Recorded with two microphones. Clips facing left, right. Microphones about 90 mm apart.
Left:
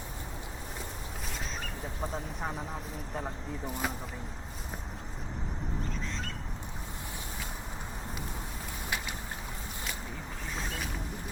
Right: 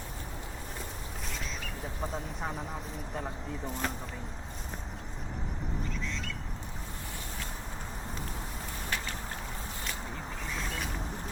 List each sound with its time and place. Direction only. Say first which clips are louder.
2.0 s speech: even; centre (ahead or behind)
5.9 s bird: even; 40° left (ahead or behind)